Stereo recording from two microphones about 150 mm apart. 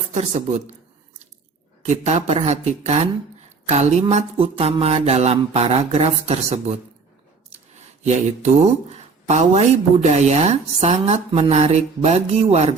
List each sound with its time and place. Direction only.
0.1 s speech: 50° right (ahead or behind)
1.8 s speech: 50° right (ahead or behind)
7.8 s speech: 50° right (ahead or behind)